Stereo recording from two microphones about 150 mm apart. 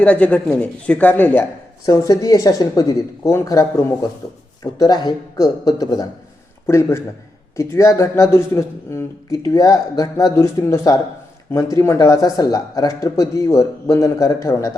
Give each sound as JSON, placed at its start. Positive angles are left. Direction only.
{"t": 0.0, "sound": "speech", "side_deg": 10}
{"t": 1.9, "sound": "speech", "side_deg": 25}